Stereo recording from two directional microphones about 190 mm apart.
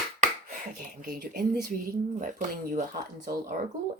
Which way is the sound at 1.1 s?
50° right (ahead or behind).